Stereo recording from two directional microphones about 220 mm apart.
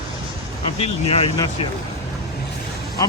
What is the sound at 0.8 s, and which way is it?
Speech, 25° left (ahead or behind).